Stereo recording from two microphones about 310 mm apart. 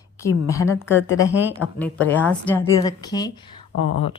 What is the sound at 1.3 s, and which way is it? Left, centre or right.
Speech, centre.